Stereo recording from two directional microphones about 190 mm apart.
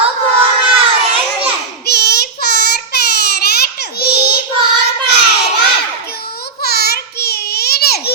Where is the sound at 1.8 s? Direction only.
55° left (ahead or behind).